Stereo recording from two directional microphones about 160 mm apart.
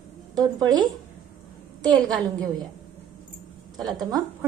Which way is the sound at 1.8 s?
25° right (ahead or behind).